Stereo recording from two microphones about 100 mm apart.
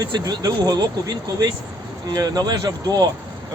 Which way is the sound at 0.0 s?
40° right (ahead or behind).